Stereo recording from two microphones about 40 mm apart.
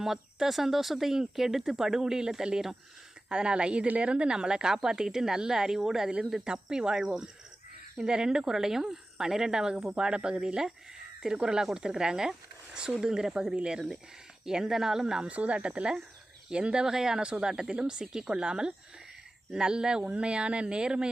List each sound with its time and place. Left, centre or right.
0.0 s speech: centre
9.7 s speech: right
15.3 s speech: right